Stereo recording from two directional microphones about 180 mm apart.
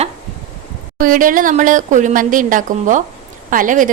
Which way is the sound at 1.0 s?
50° right (ahead or behind).